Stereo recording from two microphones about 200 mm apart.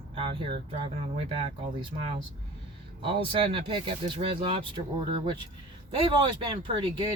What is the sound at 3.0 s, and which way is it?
Speech, 25° right (ahead or behind).